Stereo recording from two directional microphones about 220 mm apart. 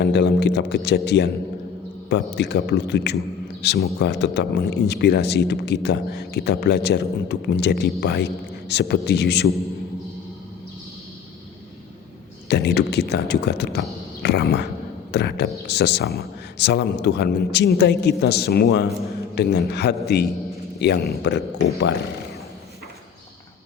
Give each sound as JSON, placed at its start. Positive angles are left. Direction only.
{"t": 0.0, "sound": "speech", "side_deg": 50}
{"t": 12.5, "sound": "speech", "side_deg": 50}